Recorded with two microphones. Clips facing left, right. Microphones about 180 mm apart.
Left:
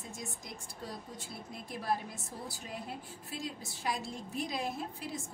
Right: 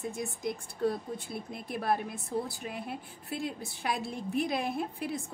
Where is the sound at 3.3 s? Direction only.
60° right (ahead or behind).